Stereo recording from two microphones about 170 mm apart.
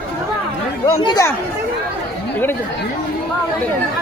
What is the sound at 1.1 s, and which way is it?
Speech, 20° left (ahead or behind).